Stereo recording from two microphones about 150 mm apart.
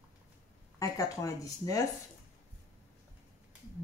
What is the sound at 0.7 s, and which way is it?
Speech, 20° left (ahead or behind).